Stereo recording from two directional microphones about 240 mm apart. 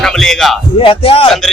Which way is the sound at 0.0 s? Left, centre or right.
Centre.